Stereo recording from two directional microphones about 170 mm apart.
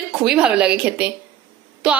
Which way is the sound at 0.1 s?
5° right (ahead or behind).